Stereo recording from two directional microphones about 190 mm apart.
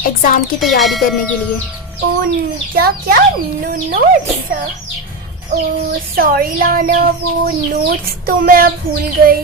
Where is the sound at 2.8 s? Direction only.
55° right (ahead or behind).